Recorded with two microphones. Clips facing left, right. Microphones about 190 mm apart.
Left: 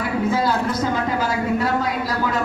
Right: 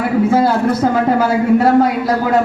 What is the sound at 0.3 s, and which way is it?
A woman's voice, 60° right (ahead or behind).